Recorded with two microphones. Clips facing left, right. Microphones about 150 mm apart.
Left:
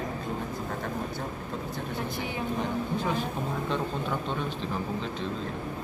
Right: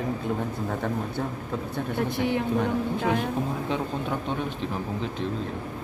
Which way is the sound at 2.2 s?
70° right (ahead or behind).